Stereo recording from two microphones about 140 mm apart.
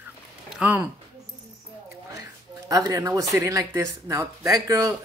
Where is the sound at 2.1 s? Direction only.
25° right (ahead or behind).